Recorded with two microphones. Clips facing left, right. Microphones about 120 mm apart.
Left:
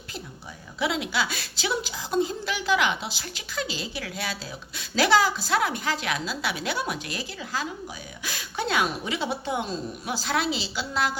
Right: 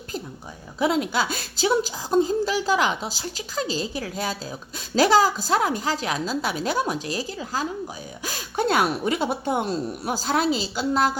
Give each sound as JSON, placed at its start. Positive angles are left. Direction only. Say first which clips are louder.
{"t": 0.8, "sound": "a woman's voice", "louder": "right 5 dB", "side_deg": -45}